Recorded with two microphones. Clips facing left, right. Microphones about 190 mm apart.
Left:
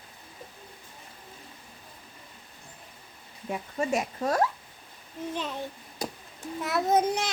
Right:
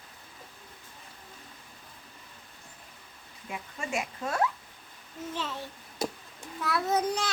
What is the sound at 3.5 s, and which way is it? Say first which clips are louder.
Speech: left 6 dB; 40° left (ahead or behind).